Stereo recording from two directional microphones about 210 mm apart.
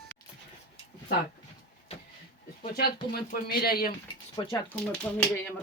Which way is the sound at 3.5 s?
45° left (ahead or behind).